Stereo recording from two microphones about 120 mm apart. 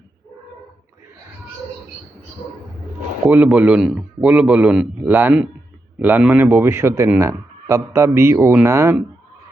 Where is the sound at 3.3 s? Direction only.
10° right (ahead or behind).